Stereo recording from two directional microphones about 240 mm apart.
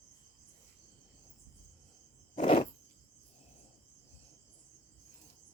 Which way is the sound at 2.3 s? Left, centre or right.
Left.